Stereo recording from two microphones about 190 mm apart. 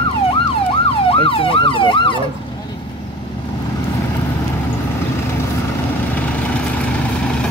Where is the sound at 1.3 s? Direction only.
30° left (ahead or behind).